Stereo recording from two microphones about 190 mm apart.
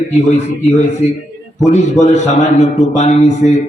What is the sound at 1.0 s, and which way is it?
A man's voice, 35° left (ahead or behind).